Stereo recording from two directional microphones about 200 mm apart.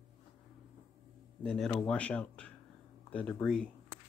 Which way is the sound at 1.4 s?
5° left (ahead or behind).